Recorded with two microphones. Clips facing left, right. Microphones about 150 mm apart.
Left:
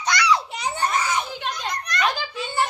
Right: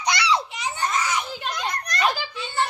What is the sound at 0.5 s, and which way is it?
Children playing, 30° left (ahead or behind).